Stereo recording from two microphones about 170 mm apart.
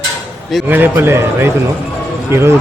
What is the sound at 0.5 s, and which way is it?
A man's voice, 10° right (ahead or behind).